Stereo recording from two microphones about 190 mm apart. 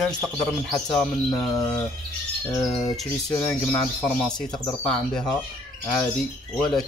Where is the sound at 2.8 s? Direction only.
10° left (ahead or behind).